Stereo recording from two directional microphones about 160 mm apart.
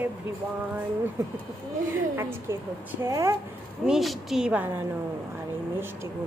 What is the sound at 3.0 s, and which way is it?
Speech, 20° right (ahead or behind).